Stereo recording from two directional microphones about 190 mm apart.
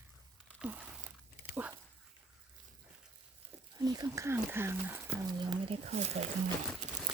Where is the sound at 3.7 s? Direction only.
20° right (ahead or behind).